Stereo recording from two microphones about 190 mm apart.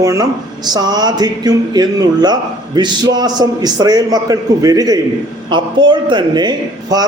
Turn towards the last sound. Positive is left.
turn(degrees=-20)  # may be behind; listen again after turning